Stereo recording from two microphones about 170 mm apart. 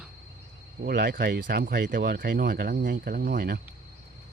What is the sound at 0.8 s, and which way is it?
Speech, 65° right (ahead or behind).